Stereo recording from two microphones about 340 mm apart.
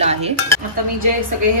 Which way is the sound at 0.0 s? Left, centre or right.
Centre.